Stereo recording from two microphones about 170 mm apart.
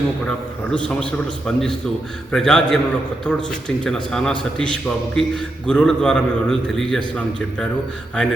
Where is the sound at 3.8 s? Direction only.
5° left (ahead or behind).